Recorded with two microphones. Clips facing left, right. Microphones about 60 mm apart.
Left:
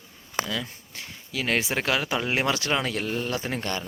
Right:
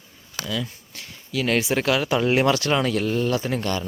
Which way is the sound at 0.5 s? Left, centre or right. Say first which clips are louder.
Right 3 dB; left.